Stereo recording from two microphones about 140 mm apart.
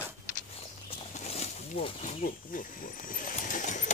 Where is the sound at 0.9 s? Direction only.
50° left (ahead or behind).